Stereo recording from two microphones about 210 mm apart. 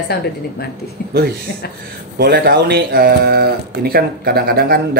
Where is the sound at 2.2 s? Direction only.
50° right (ahead or behind).